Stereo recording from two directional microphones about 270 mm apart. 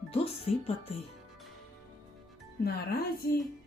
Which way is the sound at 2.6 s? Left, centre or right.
Left.